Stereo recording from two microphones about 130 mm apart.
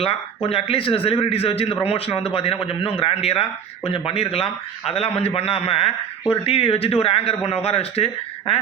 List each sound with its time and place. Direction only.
0.0 s a man's voice: 50° left (ahead or behind)